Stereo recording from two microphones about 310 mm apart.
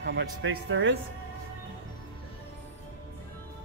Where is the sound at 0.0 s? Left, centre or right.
Right.